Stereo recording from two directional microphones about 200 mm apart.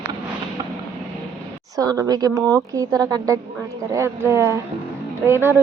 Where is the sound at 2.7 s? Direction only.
15° right (ahead or behind).